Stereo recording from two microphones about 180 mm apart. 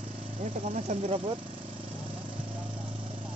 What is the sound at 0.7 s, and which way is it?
Speech, 40° right (ahead or behind).